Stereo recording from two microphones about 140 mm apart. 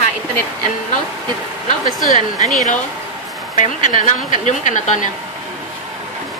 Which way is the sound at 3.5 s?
65° left (ahead or behind).